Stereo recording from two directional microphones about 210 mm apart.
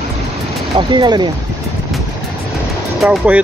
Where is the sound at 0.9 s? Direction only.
20° right (ahead or behind).